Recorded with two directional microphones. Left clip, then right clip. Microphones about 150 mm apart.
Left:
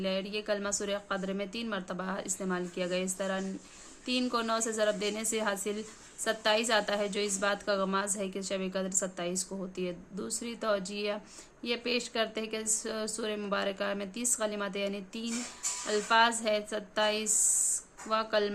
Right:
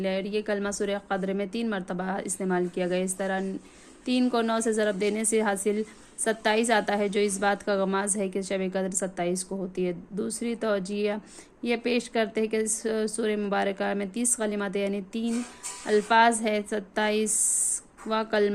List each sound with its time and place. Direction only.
0.0 s a woman's voice: 35° right (ahead or behind)